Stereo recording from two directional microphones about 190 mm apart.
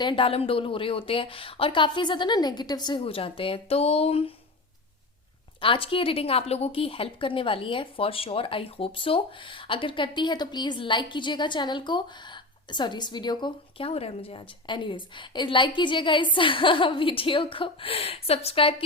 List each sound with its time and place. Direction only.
0.0 s a woman's voice: 25° left (ahead or behind)
5.5 s a woman's voice: 30° left (ahead or behind)